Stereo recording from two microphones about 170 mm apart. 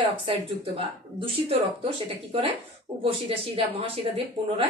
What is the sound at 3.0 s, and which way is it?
Speech, 35° right (ahead or behind).